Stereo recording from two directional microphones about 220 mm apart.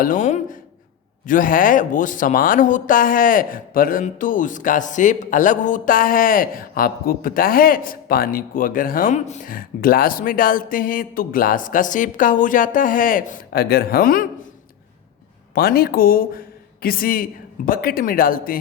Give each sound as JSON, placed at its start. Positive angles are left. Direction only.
{"t": 0.0, "sound": "speech", "side_deg": 35}
{"t": 15.5, "sound": "speech", "side_deg": 45}